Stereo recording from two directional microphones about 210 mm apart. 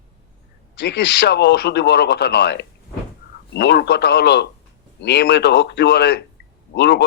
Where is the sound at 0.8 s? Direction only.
55° left (ahead or behind).